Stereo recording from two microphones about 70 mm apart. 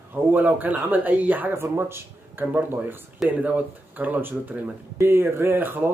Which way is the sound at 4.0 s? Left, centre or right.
Right.